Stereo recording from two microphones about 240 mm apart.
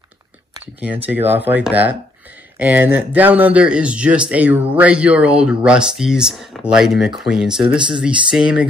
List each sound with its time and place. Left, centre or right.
0.7 s speech: centre
7.6 s speech: centre
8.0 s speech: centre